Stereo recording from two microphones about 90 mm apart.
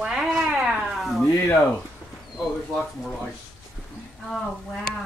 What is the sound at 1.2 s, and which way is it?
Speech, 35° left (ahead or behind).